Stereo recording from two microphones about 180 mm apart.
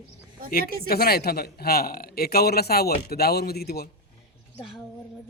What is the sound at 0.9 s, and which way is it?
A man's voice, 60° left (ahead or behind).